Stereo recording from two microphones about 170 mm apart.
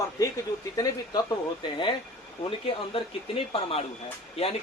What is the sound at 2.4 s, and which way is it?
Speech, 30° left (ahead or behind).